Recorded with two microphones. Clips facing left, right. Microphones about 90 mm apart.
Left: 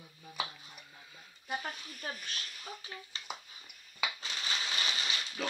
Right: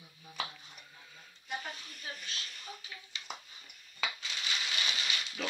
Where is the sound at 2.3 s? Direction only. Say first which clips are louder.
Left 1 dB; 50° left (ahead or behind).